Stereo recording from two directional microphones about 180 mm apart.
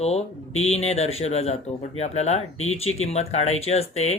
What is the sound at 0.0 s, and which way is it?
Speech, 35° left (ahead or behind).